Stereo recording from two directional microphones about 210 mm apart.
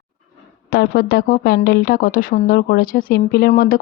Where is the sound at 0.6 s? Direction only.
45° left (ahead or behind).